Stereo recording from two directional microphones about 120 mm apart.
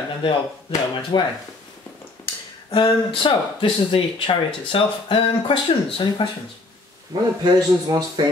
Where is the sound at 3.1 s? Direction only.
50° left (ahead or behind).